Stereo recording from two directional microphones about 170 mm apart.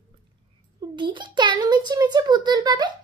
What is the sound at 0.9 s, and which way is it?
A child's voice, 30° right (ahead or behind).